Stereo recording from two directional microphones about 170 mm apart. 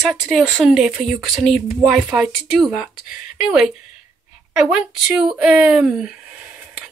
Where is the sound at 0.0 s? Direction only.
Centre (ahead or behind).